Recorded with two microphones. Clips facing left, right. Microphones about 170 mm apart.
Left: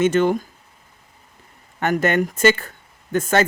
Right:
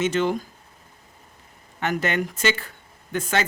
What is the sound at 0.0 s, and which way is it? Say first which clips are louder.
Speech: left 5 dB; 50° left (ahead or behind).